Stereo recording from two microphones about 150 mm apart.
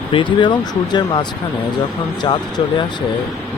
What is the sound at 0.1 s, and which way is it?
Speech, 35° left (ahead or behind).